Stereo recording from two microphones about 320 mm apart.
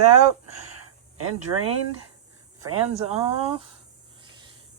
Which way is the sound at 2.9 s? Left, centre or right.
Centre.